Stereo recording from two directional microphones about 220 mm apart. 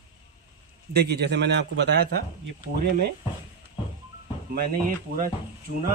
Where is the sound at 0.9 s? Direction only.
50° right (ahead or behind).